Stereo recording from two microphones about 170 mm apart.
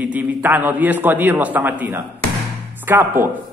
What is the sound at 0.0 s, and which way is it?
A man's voice, 10° right (ahead or behind).